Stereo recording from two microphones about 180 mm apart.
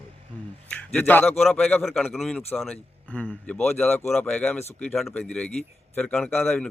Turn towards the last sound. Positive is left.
turn(degrees=5)  # may be behind; listen again after turning